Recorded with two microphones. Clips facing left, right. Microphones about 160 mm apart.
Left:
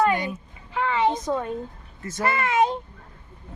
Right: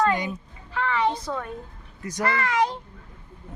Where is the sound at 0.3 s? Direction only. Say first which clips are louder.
Even; 15° left (ahead or behind).